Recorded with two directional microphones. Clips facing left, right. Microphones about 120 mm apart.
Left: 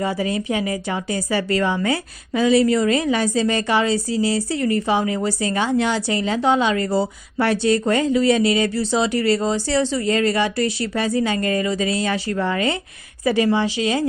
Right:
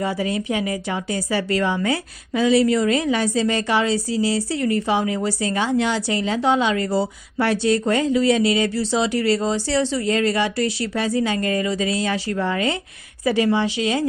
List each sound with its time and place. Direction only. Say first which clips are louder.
0.0 s a woman's voice: left 1 dB; 40° left (ahead or behind)